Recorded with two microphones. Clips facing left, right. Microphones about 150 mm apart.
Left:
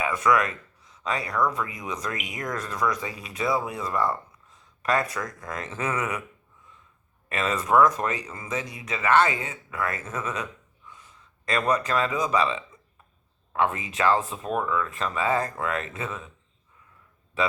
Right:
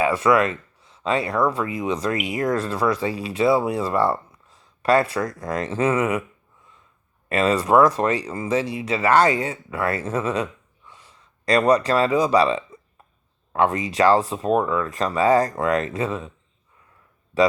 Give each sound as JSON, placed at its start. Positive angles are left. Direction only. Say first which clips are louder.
{"t": 0.0, "sound": "speech", "louder": "right 5 dB", "side_deg": -30}
{"t": 7.3, "sound": "speech", "louder": "right 6 dB", "side_deg": -35}
{"t": 17.3, "sound": "a man's voice", "louder": "right 8 dB", "side_deg": -35}